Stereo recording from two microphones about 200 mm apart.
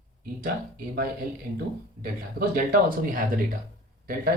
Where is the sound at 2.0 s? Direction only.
45° right (ahead or behind).